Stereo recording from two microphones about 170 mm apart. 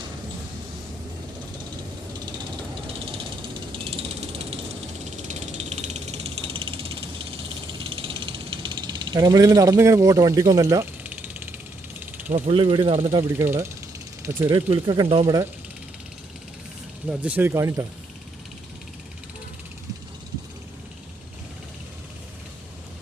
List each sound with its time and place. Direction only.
3.7 s mechanisms: 35° right (ahead or behind)
5.1 s ratchet: 45° right (ahead or behind)
7.9 s snake: 30° right (ahead or behind); by 12.0 s 10° right (ahead or behind)
12.3 s speech: 35° right (ahead or behind)
13.4 s speech: 15° right (ahead or behind)
14.5 s speech: 25° right (ahead or behind)
17.1 s speech: 10° right (ahead or behind)